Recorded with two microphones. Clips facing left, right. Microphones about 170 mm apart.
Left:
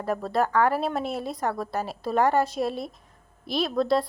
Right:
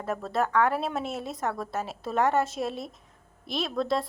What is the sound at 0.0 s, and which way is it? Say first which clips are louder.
A woman's voice: left 3 dB; centre (ahead or behind).